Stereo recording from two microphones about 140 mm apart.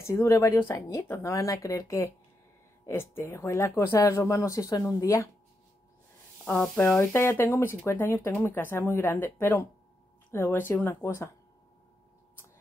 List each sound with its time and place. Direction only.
0.0 s speech: 20° left (ahead or behind)
6.4 s speech: 10° left (ahead or behind)